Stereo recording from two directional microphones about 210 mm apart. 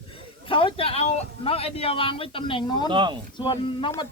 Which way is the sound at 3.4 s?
25° left (ahead or behind).